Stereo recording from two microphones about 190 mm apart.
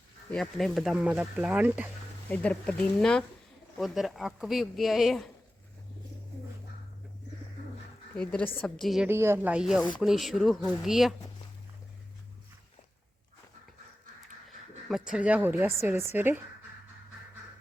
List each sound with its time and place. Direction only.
0.3 s speech: centre (ahead or behind)
2.3 s speech: 5° left (ahead or behind)
8.1 s speech: 5° left (ahead or behind)
9.0 s speech: 10° right (ahead or behind)
14.8 s speech: 5° right (ahead or behind)